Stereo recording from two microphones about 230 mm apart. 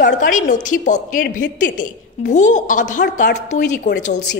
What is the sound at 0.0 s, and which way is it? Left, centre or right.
A woman's voice, left.